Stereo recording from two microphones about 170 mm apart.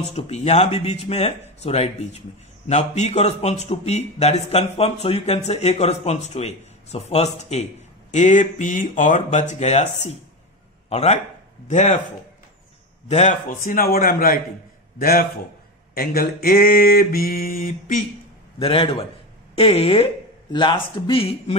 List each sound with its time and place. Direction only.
0.1 s a man's voice: 40° left (ahead or behind)
13.1 s mantra: 45° left (ahead or behind)
18.6 s a man's voice: 30° left (ahead or behind)